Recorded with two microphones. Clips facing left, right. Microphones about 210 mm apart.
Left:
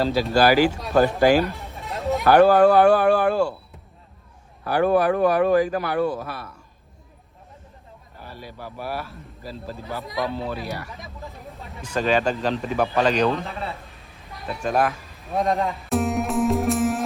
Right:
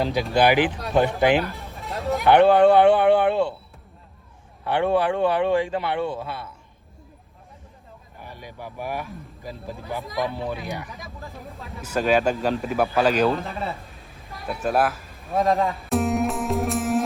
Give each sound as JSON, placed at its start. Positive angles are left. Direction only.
{"t": 0.0, "sound": "a man's voice", "side_deg": -15}
{"t": 0.8, "sound": "speech", "side_deg": 0}
{"t": 1.4, "sound": "a sound", "side_deg": 0}
{"t": 2.3, "sound": "a man's voice", "side_deg": -20}
{"t": 4.6, "sound": "a man's voice", "side_deg": -25}
{"t": 8.2, "sound": "speech", "side_deg": -15}
{"t": 10.0, "sound": "speech", "side_deg": 0}
{"t": 10.3, "sound": "speech", "side_deg": -15}
{"t": 10.8, "sound": "speech", "side_deg": 0}